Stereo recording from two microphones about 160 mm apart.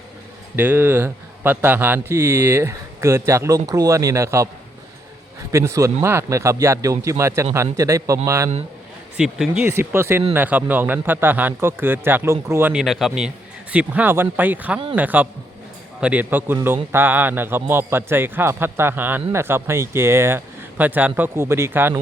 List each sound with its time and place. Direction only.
0.5 s a man's voice: 15° right (ahead or behind)
5.5 s speech: 20° right (ahead or behind)
9.1 s speech: 5° right (ahead or behind)
9.6 s a man's voice: 15° right (ahead or behind)
12.7 s a man's voice: centre (ahead or behind)